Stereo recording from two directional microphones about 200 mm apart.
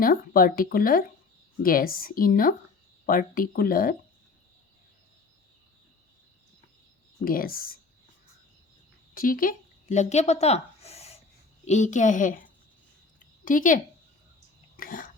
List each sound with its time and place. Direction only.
0.0 s speech: 45° left (ahead or behind)
7.3 s speech: 45° left (ahead or behind)
9.1 s a woman's voice: 45° left (ahead or behind)
13.1 s a sound: 40° left (ahead or behind)